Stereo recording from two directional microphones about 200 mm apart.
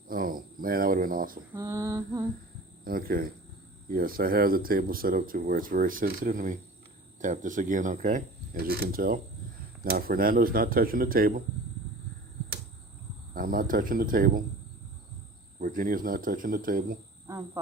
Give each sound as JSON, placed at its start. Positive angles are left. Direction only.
{"t": 0.1, "sound": "cricket", "side_deg": -45}
{"t": 1.5, "sound": "female singing", "side_deg": -15}
{"t": 2.8, "sound": "cricket", "side_deg": -45}
{"t": 3.8, "sound": "speech", "side_deg": -45}
{"t": 13.3, "sound": "speech", "side_deg": -45}
{"t": 15.6, "sound": "speech", "side_deg": -45}
{"t": 17.2, "sound": "cricket", "side_deg": -15}